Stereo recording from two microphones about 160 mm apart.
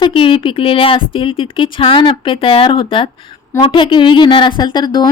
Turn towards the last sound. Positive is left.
turn(degrees=25)  # may be behind; listen again after turning